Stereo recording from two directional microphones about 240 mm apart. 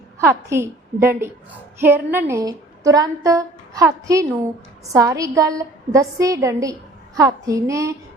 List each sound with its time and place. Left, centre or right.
0.2 s a woman's voice: centre